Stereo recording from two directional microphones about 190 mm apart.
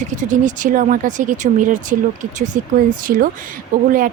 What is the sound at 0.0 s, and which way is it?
Speech, 40° right (ahead or behind).